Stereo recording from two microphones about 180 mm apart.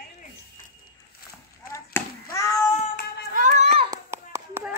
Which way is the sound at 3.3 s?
45° right (ahead or behind).